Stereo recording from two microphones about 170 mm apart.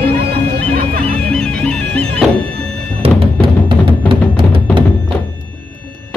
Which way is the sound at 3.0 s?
35° right (ahead or behind).